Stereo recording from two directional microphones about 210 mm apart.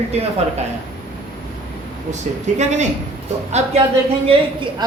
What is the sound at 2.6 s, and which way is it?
Speech, 35° right (ahead or behind).